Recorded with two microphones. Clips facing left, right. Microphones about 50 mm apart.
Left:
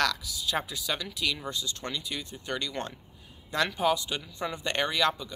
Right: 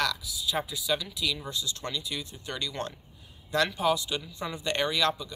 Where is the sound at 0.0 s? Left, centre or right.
Left.